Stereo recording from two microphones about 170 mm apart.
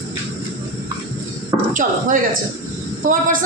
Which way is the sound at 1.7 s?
50° right (ahead or behind).